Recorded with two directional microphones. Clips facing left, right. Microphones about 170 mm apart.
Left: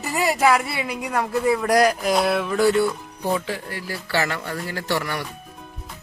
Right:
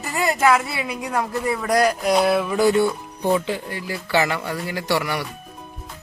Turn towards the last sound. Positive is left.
turn(degrees=-10)  # may be behind; listen again after turning